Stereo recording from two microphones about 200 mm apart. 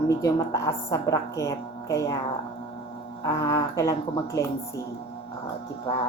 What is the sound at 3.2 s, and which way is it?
A woman's voice, 15° left (ahead or behind).